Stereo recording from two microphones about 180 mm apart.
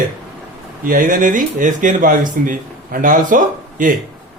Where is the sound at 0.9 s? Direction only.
50° right (ahead or behind).